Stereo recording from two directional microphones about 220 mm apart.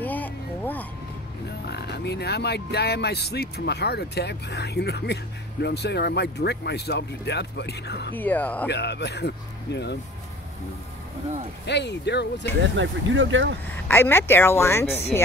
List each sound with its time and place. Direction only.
0.0 s vehicle: 10° left (ahead or behind)
1.7 s speech: 50° left (ahead or behind)
8.2 s speech: 5° left (ahead or behind)
8.6 s speech: 50° left (ahead or behind)
11.6 s speech: 50° left (ahead or behind)
12.7 s speech: 55° right (ahead or behind)
13.8 s speech: 10° left (ahead or behind)